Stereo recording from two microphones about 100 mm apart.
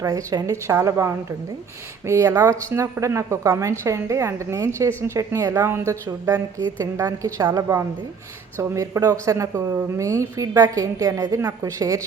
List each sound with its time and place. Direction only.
0.0 s a woman's voice: 35° right (ahead or behind)